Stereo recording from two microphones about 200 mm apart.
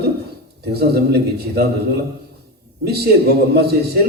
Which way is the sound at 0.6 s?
55° right (ahead or behind).